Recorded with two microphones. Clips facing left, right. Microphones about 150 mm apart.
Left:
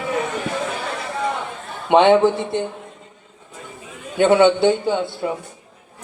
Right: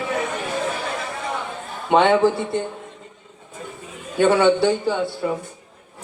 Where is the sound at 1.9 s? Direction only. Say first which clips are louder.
Left 3 dB; 20° left (ahead or behind).